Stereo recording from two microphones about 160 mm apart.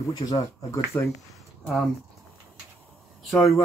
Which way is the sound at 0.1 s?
20° left (ahead or behind).